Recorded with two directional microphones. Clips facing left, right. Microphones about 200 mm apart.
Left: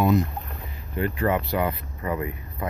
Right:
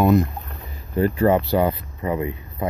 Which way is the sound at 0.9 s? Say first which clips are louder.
Right 6 dB; 35° right (ahead or behind).